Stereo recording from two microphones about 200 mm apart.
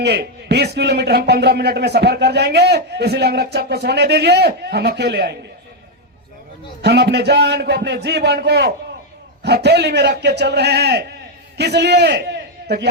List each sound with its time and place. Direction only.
0.0 s a man's voice: 55° right (ahead or behind)
6.8 s a man's voice: 55° right (ahead or behind)